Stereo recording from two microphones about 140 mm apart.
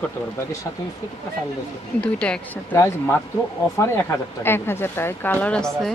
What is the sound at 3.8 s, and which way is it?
Speech, 15° left (ahead or behind).